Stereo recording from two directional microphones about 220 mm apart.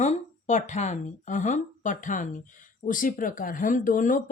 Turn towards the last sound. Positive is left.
turn(degrees=35)  # may be behind; listen again after turning